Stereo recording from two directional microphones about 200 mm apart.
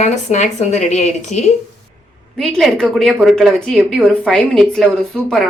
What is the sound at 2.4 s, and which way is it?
A woman's voice, centre (ahead or behind).